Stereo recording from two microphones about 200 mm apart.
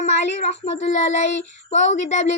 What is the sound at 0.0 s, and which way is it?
A woman's voice, 35° left (ahead or behind).